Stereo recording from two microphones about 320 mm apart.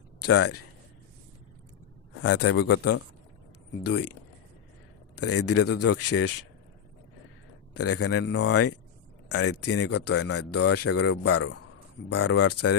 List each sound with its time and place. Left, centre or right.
0.2 s speech: left
2.2 s a man's voice: left
5.1 s speech: left
7.7 s speech: left